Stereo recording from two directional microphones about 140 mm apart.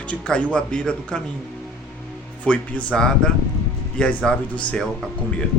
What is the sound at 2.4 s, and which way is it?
Speech, 10° left (ahead or behind).